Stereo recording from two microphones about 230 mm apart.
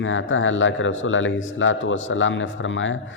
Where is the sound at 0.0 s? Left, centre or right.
Left.